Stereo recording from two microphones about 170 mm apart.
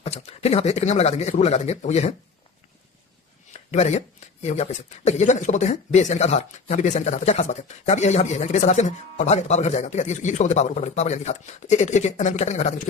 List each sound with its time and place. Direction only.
0.0 s speech: 35° left (ahead or behind)
3.7 s speech: 40° left (ahead or behind)